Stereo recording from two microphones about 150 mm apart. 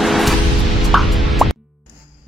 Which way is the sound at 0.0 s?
Centre (ahead or behind).